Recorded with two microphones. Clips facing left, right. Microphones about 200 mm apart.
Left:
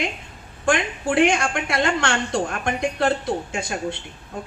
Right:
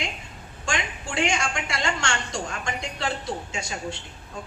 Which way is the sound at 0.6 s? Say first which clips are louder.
Left 9 dB; 55° left (ahead or behind).